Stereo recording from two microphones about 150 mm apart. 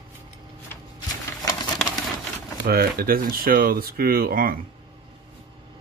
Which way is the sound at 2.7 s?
90° right.